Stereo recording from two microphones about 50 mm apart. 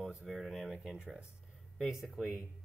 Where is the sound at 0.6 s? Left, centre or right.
Centre.